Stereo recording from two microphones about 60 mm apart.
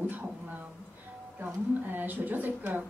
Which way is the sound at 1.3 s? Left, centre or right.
Right.